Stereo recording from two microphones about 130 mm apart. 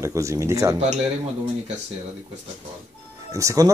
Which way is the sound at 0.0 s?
20° right (ahead or behind).